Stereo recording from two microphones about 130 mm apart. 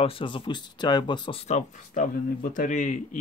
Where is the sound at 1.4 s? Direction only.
70° left (ahead or behind).